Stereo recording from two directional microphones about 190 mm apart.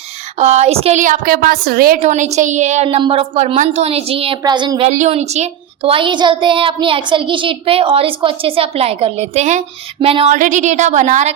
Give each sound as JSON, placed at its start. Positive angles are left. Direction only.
{"t": 0.3, "sound": "a woman's voice", "side_deg": -35}
{"t": 2.0, "sound": "a woman's voice", "side_deg": -35}
{"t": 4.9, "sound": "a woman's voice", "side_deg": -35}
{"t": 10.3, "sound": "a woman's voice", "side_deg": -40}